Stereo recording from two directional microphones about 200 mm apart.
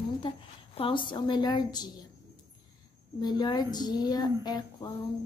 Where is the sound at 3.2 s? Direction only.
20° left (ahead or behind).